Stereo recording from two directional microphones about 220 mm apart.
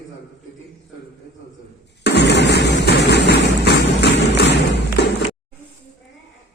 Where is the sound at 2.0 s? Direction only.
50° left (ahead or behind).